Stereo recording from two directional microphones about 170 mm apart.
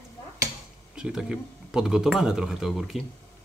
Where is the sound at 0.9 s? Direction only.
5° right (ahead or behind).